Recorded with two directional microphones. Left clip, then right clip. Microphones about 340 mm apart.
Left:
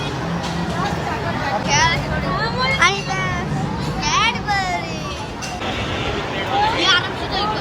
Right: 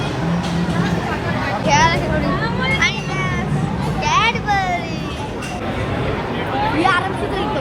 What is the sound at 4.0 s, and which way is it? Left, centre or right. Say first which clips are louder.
Children playing: right 2 dB; centre.